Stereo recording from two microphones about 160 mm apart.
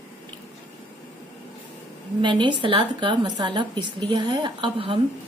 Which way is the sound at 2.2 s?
30° right (ahead or behind).